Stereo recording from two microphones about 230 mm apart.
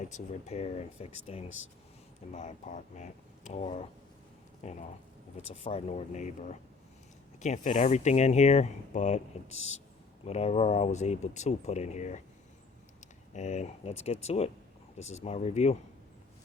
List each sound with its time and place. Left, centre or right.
0.1 s speech: left
13.3 s speech: left